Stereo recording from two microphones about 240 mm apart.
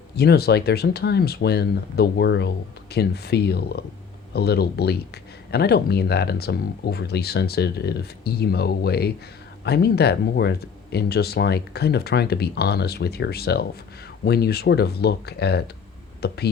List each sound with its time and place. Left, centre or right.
0.2 s speech: left